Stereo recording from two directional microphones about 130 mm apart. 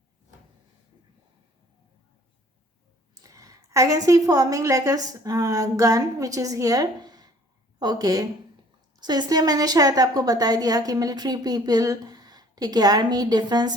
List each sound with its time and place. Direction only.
3.2 s a woman's voice: 25° right (ahead or behind)